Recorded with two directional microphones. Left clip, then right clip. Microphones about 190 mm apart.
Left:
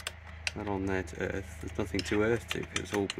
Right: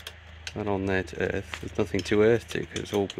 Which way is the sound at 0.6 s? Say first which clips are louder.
Right 8 dB; 50° right (ahead or behind).